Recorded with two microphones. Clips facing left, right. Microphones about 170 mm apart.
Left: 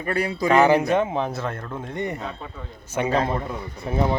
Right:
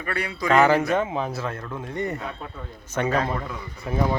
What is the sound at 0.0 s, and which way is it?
Speech, 30° left (ahead or behind).